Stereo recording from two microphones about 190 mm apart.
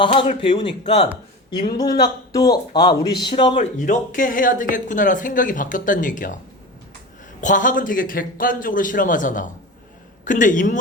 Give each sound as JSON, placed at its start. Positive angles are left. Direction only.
{"t": 0.0, "sound": "speech", "side_deg": 30}
{"t": 1.8, "sound": "speech", "side_deg": 20}
{"t": 3.8, "sound": "speech", "side_deg": 45}
{"t": 7.4, "sound": "speech", "side_deg": 45}